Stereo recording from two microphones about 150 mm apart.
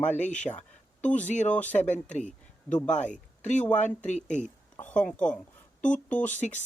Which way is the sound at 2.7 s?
5° left (ahead or behind).